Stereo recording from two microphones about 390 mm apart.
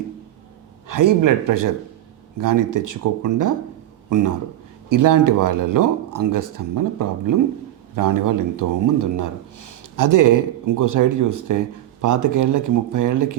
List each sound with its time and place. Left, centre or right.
0.9 s a man's voice: right